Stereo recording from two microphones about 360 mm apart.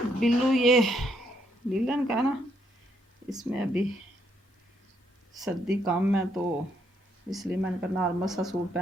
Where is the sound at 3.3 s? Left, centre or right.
Centre.